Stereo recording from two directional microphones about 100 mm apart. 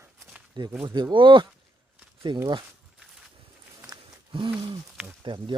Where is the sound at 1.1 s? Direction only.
55° right (ahead or behind).